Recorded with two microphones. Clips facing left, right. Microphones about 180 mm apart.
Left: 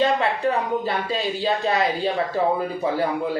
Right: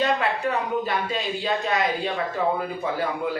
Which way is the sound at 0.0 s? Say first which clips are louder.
Left 3 dB; 30° left (ahead or behind).